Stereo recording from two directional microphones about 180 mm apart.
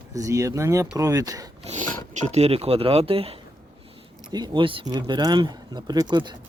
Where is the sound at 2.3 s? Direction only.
35° right (ahead or behind).